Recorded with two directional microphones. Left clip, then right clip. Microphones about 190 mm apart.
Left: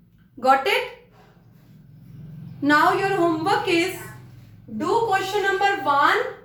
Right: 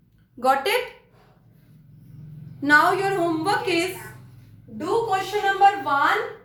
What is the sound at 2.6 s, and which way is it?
A woman's voice, 25° right (ahead or behind).